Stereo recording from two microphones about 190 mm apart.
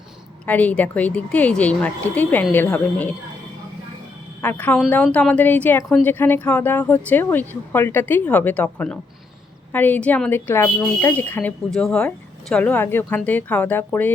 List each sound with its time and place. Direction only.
0.4 s a woman's voice: 10° left (ahead or behind)
4.4 s a woman's voice: 10° left (ahead or behind)